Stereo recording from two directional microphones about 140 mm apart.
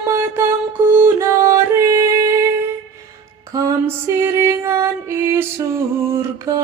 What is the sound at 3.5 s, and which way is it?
Music, 20° right (ahead or behind).